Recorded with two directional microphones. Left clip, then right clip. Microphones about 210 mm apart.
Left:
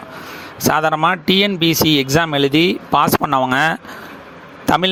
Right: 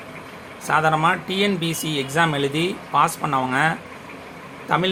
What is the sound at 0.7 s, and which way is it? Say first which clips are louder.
A man's voice: left 3 dB; 45° left (ahead or behind).